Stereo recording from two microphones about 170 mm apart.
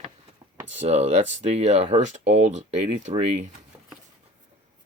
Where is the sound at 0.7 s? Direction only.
40° right (ahead or behind).